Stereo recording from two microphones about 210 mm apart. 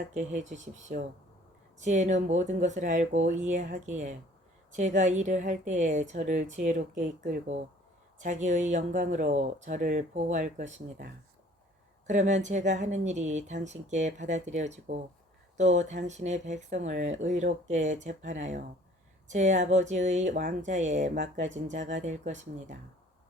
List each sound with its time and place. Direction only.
0.1 s speech: 35° right (ahead or behind)